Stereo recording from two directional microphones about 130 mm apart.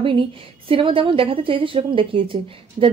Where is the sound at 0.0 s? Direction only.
45° right (ahead or behind).